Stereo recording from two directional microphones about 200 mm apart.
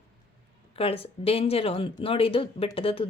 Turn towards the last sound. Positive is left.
turn(degrees=25)  # may be behind; listen again after turning